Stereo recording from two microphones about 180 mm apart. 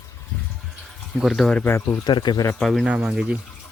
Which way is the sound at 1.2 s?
Centre (ahead or behind).